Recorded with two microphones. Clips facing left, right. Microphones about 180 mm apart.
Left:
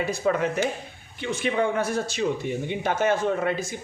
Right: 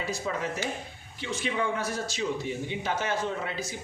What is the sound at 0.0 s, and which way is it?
A man's voice, 60° left (ahead or behind).